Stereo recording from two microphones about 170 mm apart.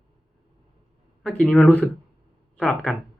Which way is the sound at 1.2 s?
5° left (ahead or behind).